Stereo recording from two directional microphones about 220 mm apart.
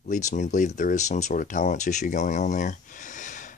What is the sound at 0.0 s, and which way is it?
Speech, 35° left (ahead or behind).